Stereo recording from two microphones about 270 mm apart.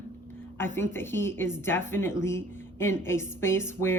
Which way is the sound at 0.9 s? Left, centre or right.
Centre.